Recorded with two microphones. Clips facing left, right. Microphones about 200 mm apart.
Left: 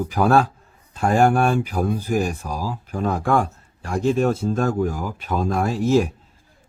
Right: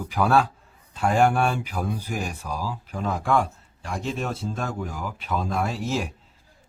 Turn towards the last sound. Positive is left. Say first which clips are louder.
# left 8 dB
turn(degrees=45)  # may be behind; listen again after turning